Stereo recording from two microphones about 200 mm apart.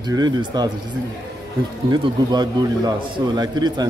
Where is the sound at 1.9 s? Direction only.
20° right (ahead or behind).